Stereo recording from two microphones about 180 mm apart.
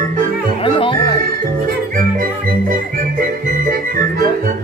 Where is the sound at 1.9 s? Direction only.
55° right (ahead or behind).